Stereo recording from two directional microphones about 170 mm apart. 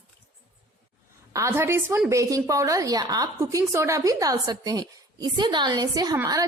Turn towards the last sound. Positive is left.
turn(degrees=-20)  # may be behind; listen again after turning